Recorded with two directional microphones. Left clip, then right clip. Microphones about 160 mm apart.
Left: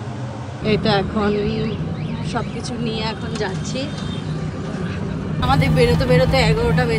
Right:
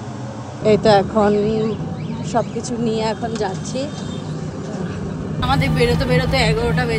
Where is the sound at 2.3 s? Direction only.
75° right (ahead or behind).